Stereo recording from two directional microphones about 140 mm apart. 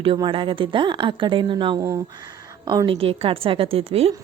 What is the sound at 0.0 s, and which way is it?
A woman's voice, 40° right (ahead or behind).